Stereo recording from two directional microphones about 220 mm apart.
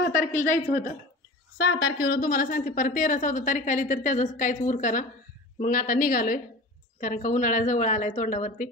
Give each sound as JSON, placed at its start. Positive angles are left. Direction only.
{"t": 0.0, "sound": "a woman's voice", "side_deg": 40}
{"t": 1.6, "sound": "a woman's voice", "side_deg": 45}